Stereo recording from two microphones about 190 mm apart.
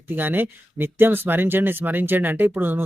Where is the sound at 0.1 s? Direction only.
10° right (ahead or behind).